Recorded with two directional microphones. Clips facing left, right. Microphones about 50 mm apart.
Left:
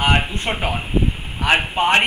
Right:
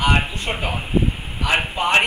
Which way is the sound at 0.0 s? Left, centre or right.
Left.